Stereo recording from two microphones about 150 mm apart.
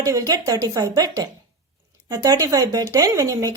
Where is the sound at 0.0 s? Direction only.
25° right (ahead or behind).